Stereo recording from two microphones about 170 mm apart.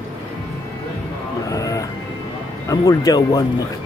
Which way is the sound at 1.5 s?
20° left (ahead or behind).